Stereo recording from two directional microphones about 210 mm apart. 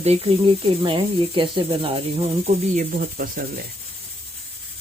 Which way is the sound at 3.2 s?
45° right (ahead or behind).